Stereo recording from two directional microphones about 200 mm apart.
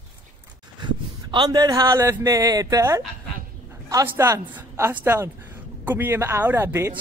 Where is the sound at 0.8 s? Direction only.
20° right (ahead or behind).